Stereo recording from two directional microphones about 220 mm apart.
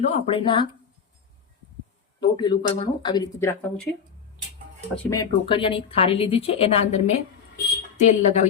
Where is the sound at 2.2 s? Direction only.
20° left (ahead or behind).